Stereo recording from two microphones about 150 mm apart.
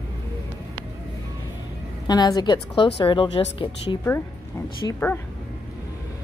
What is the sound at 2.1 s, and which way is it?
Speech, 25° left (ahead or behind).